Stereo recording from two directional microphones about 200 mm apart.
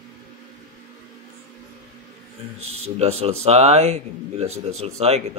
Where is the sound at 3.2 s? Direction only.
30° right (ahead or behind).